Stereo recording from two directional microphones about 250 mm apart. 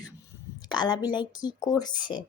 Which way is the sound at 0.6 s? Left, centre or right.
Centre.